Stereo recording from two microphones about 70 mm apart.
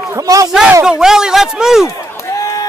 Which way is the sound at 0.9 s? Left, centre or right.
Centre.